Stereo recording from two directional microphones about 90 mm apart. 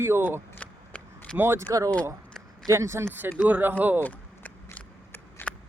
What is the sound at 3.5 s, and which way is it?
Speech, 20° right (ahead or behind).